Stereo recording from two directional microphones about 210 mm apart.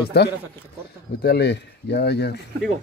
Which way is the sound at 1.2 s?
50° left (ahead or behind).